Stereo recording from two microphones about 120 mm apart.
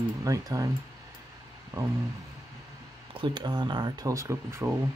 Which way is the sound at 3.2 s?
40° right (ahead or behind).